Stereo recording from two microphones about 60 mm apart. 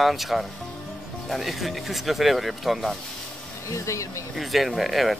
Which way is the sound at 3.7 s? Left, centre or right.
Left.